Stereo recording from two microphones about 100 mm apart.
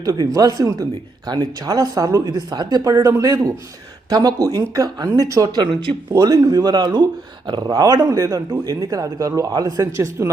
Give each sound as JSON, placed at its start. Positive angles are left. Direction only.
{"t": 0.0, "sound": "speech", "side_deg": -35}